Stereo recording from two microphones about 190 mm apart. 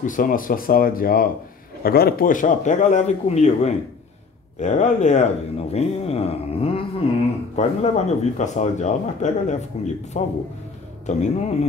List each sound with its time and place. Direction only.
0.0 s speech: 45° left (ahead or behind)